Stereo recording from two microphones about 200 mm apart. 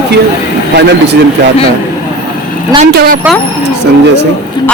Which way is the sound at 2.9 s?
50° right (ahead or behind).